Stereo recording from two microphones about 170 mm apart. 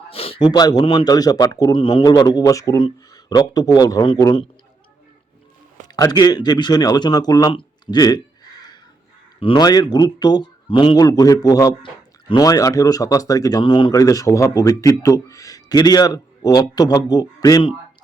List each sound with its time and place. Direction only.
0.1 s speech: 35° left (ahead or behind)
6.0 s speech: 25° left (ahead or behind)
9.4 s speech: 30° left (ahead or behind)